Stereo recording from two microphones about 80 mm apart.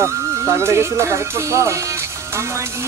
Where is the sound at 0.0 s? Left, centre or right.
Right.